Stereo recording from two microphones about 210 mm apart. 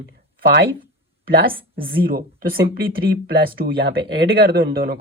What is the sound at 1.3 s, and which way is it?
Speech, 45° right (ahead or behind).